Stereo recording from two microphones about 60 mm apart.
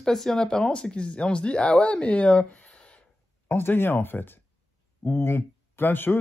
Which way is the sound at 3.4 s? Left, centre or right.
Left.